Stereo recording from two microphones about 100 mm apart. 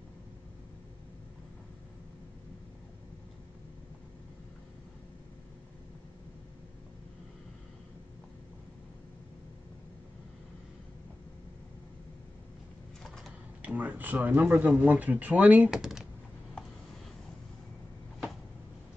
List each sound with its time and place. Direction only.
13.6 s speech: 15° right (ahead or behind)